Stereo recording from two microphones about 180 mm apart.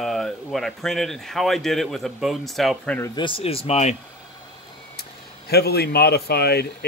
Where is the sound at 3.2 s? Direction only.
30° left (ahead or behind).